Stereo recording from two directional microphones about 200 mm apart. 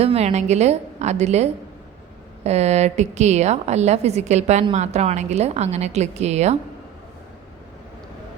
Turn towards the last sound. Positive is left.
turn(degrees=-35)  # may be behind; listen again after turning